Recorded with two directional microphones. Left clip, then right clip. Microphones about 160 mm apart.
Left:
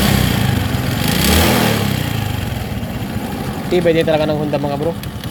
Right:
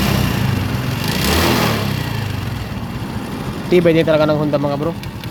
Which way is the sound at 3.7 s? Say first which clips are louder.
Right 1 dB; 30° right (ahead or behind).